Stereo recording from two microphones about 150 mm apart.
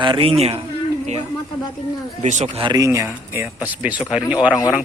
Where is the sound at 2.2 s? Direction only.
50° right (ahead or behind).